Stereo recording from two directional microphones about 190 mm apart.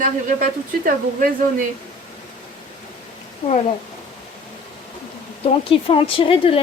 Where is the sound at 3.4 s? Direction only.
35° left (ahead or behind).